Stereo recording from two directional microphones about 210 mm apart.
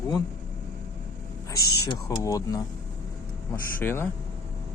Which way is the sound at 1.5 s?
15° left (ahead or behind).